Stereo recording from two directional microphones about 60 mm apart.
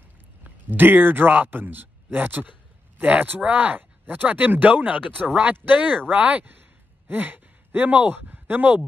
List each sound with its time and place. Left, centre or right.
0.4 s a man's voice: right